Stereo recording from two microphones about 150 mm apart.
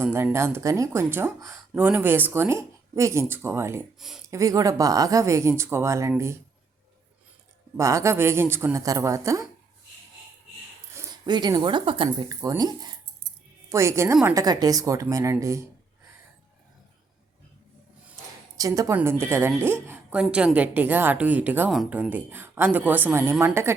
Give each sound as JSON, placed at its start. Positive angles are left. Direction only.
{"t": 0.0, "sound": "speech", "side_deg": -15}
{"t": 7.8, "sound": "speech", "side_deg": -20}
{"t": 10.9, "sound": "speech", "side_deg": -30}
{"t": 18.5, "sound": "a woman's voice", "side_deg": -20}